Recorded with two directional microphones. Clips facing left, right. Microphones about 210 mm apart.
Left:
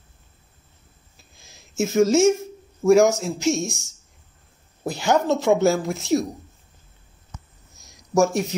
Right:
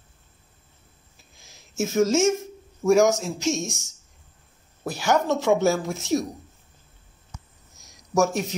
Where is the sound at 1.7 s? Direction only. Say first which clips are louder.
Left 3 dB; 10° left (ahead or behind).